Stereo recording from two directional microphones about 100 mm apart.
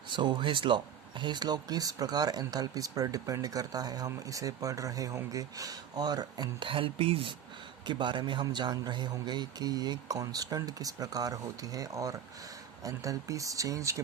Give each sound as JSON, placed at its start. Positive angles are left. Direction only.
{"t": 0.1, "sound": "a man's voice", "side_deg": -50}
{"t": 6.7, "sound": "speech", "side_deg": -60}
{"t": 7.9, "sound": "a man's voice", "side_deg": -50}